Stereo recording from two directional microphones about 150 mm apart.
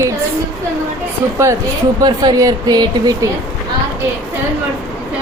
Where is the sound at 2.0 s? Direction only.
25° right (ahead or behind).